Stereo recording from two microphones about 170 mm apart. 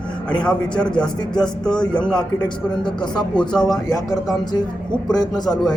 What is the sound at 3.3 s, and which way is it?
Speech, 5° left (ahead or behind).